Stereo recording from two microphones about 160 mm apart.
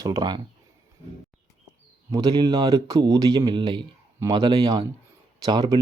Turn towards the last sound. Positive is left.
turn(degrees=-25)  # may be behind; listen again after turning